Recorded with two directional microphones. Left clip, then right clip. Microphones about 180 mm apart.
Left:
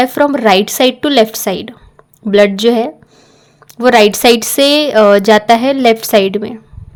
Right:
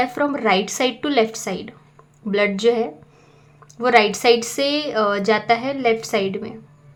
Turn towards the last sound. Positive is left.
turn(degrees=45)  # may be behind; listen again after turning